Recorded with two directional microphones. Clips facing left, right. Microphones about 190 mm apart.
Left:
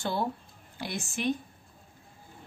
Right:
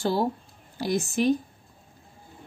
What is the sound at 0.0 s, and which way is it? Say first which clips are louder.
A woman's voice: right 6 dB; 35° right (ahead or behind).